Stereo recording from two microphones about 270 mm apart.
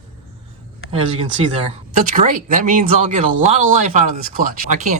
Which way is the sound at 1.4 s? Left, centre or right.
Right.